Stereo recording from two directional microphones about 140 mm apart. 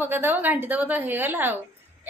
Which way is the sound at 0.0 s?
15° right (ahead or behind).